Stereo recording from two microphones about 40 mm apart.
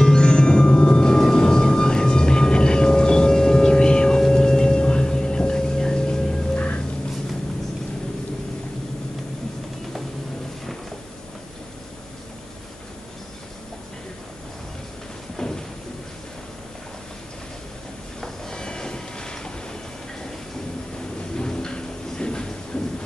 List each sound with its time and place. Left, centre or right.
0.0 s music: centre
6.5 s music: left
15.3 s a sound: centre
18.2 s train: centre
21.4 s a sound: centre
22.7 s train: left